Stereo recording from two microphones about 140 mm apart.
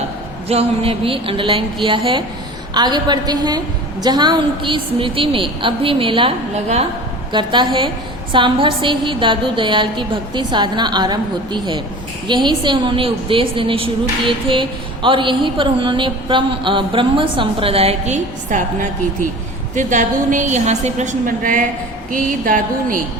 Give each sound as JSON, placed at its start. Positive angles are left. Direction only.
{"t": 0.4, "sound": "a woman's voice", "side_deg": -45}
{"t": 7.3, "sound": "a woman's voice", "side_deg": -35}
{"t": 22.1, "sound": "a sound", "side_deg": -75}